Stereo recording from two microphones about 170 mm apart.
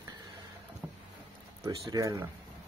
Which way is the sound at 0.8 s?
15° right (ahead or behind).